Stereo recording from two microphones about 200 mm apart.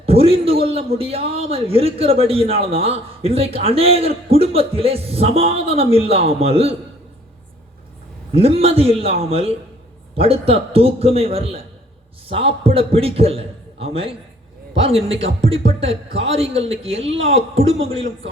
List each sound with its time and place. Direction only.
0.0 s a man's voice: 30° right (ahead or behind)
8.3 s a man's voice: 30° right (ahead or behind)